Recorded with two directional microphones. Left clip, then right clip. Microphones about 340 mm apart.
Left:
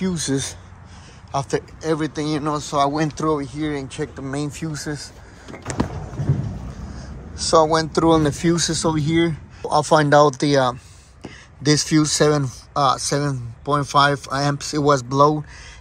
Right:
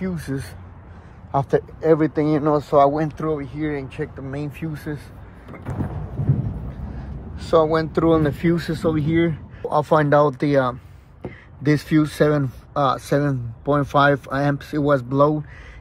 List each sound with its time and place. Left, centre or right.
0.1 s speech: centre
1.3 s speech: centre
7.3 s speech: centre